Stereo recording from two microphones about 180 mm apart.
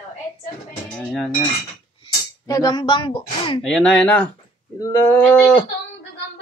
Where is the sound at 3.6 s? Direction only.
5° left (ahead or behind).